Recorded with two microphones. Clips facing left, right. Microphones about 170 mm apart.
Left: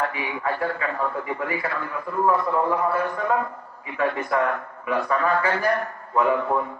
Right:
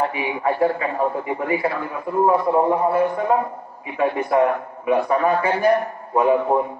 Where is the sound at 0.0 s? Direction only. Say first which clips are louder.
Right 5 dB; 20° right (ahead or behind).